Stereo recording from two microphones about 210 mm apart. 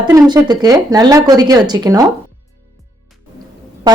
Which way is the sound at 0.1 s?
15° right (ahead or behind).